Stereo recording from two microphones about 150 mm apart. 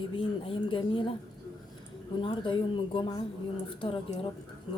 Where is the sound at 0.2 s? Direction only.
35° left (ahead or behind).